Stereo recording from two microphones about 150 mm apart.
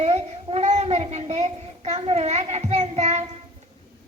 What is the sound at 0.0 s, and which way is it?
Child singing, 45° right (ahead or behind).